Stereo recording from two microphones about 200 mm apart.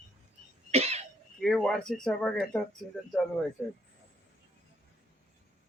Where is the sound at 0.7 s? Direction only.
30° right (ahead or behind).